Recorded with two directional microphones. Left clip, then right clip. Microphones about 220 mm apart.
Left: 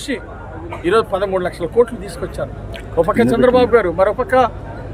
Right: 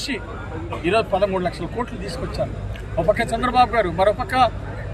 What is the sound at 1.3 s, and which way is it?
Speech, 50° left (ahead or behind).